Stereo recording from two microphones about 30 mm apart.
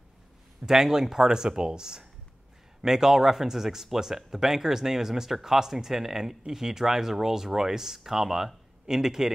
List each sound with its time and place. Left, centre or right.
0.6 s speech: centre